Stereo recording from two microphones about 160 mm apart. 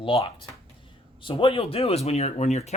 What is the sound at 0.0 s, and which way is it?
Speech, 35° left (ahead or behind).